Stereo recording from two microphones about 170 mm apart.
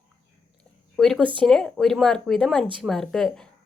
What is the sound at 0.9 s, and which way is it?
A woman's voice, centre (ahead or behind).